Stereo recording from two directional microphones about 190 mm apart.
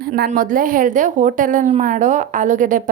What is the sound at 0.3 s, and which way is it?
A woman's voice, 45° right (ahead or behind).